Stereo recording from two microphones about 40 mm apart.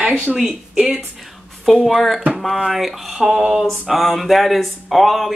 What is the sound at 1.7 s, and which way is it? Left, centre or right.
Speech, centre.